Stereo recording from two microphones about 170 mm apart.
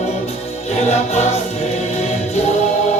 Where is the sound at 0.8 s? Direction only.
40° left (ahead or behind).